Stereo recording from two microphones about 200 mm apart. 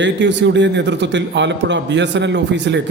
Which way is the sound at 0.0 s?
60° right (ahead or behind).